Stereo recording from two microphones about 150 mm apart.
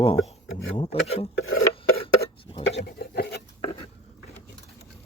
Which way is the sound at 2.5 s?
35° left (ahead or behind).